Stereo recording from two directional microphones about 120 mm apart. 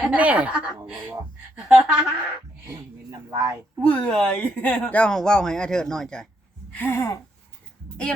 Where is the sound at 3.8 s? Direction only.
10° left (ahead or behind).